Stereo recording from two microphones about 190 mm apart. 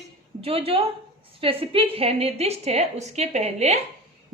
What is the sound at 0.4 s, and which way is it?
A woman's voice, 30° right (ahead or behind).